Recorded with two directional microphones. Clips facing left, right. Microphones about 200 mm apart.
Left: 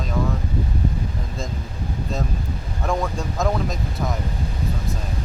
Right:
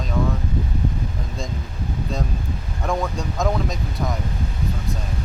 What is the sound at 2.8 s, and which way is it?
Speech, centre (ahead or behind).